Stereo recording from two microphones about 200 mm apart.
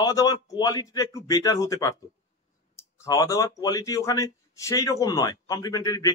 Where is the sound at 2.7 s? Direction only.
15° left (ahead or behind).